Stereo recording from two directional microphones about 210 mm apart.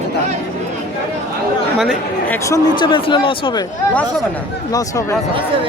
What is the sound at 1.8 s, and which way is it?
Speech, 5° left (ahead or behind).